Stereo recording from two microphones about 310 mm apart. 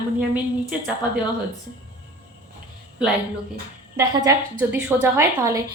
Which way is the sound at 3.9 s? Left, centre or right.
Centre.